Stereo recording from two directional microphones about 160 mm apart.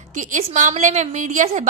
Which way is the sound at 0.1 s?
55° right (ahead or behind).